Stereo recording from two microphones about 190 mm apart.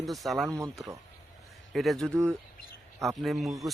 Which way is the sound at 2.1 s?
15° right (ahead or behind).